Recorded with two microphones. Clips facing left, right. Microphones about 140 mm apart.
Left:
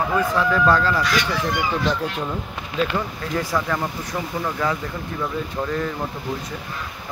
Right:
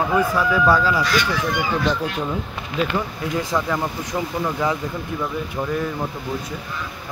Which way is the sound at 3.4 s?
15° right (ahead or behind).